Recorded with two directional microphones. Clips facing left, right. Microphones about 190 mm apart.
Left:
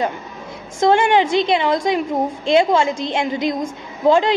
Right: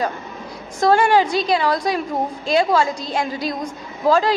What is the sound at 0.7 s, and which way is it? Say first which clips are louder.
A woman's voice: left 1 dB; 25° left (ahead or behind).